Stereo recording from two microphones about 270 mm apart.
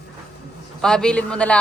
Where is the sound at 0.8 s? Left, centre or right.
Centre.